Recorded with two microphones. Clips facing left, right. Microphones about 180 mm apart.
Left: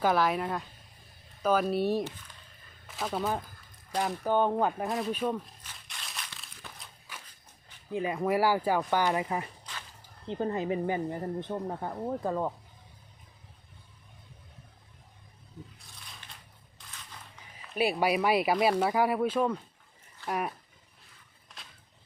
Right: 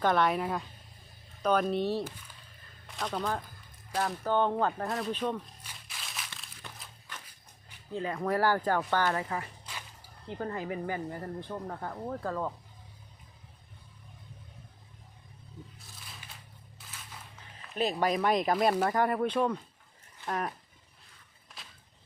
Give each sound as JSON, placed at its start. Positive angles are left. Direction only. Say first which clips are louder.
{"t": 0.0, "sound": "speech", "louder": "even", "side_deg": 5}
{"t": 4.9, "sound": "speech", "louder": "left 2 dB", "side_deg": 0}
{"t": 5.6, "sound": "crumpling", "louder": "even", "side_deg": -5}
{"t": 7.9, "sound": "speech", "louder": "left 2 dB", "side_deg": 15}
{"t": 9.6, "sound": "a sound", "louder": "even", "side_deg": -10}
{"t": 10.2, "sound": "speech", "louder": "left 5 dB", "side_deg": 20}
{"t": 15.8, "sound": "crunch", "louder": "right 1 dB", "side_deg": -5}
{"t": 18.0, "sound": "speech", "louder": "even", "side_deg": 10}